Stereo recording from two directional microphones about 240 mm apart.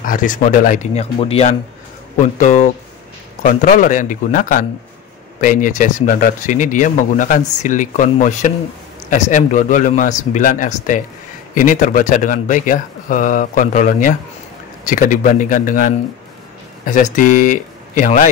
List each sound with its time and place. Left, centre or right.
0.0 s speech: left